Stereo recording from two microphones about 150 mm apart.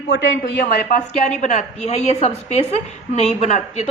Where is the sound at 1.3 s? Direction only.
55° left (ahead or behind).